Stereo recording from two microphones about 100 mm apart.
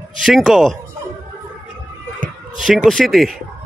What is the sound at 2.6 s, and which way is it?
Speech, centre (ahead or behind).